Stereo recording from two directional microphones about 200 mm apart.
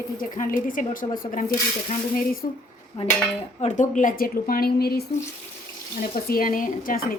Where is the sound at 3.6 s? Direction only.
35° left (ahead or behind).